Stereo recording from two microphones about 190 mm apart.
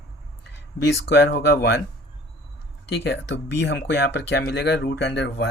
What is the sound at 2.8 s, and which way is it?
Speech, 60° left (ahead or behind).